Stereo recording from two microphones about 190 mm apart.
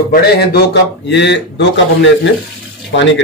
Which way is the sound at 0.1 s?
55° left (ahead or behind).